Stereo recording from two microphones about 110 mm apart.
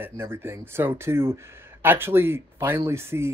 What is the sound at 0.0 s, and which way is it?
Speech, 20° right (ahead or behind).